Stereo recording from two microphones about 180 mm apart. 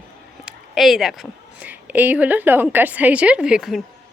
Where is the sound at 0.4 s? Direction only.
Centre (ahead or behind).